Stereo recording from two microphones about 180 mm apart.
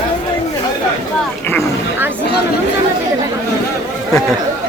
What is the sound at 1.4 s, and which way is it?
Roaring cats, 15° left (ahead or behind).